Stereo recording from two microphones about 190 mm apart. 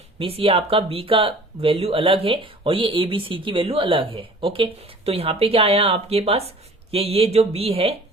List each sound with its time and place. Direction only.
0.2 s speech: 30° right (ahead or behind)